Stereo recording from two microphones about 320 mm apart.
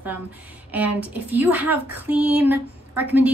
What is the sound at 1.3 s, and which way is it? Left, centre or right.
A woman's voice, centre.